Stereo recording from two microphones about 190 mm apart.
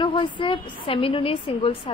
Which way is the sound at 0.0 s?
25° left (ahead or behind).